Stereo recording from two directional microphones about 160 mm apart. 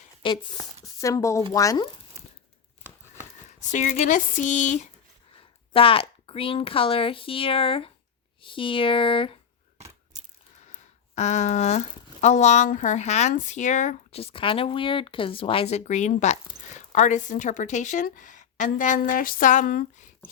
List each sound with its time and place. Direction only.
0.2 s speech: 35° left (ahead or behind)
1.0 s speech: 20° left (ahead or behind)
3.4 s speech: 50° left (ahead or behind)
5.7 s speech: 35° left (ahead or behind)
9.7 s coin: 45° right (ahead or behind)
10.7 s speech: 45° left (ahead or behind)